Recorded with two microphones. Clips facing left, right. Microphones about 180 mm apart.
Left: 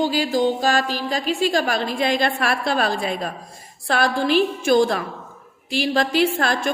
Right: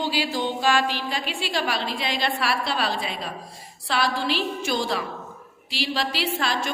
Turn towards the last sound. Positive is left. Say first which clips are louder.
# left 6 dB
turn(degrees=50)  # may be behind; listen again after turning